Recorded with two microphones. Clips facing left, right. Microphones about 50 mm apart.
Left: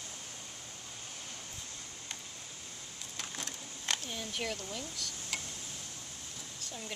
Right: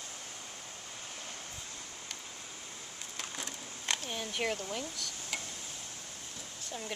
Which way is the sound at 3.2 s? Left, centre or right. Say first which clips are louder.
Right 1 dB; centre.